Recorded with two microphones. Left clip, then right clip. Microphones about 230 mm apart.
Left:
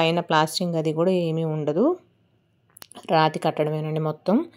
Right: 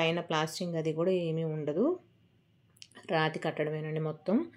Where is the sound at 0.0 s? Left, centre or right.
Left.